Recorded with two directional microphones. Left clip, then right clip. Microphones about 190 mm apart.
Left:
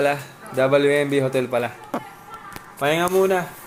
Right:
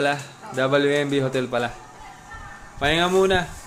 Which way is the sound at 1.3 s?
20° right (ahead or behind).